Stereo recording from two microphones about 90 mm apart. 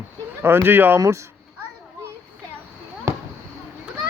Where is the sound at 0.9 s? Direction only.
35° right (ahead or behind).